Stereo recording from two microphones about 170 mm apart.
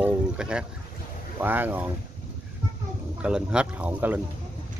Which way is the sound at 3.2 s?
5° right (ahead or behind).